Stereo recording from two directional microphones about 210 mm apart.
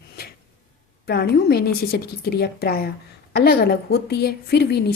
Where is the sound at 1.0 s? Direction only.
50° left (ahead or behind).